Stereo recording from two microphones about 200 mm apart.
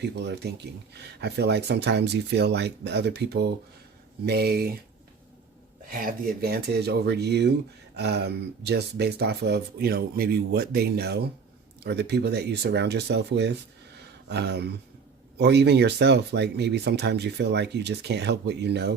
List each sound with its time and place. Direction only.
0.0 s speech: 55° right (ahead or behind)
5.9 s speech: 45° right (ahead or behind)